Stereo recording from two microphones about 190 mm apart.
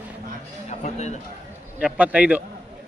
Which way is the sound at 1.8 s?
5° right (ahead or behind).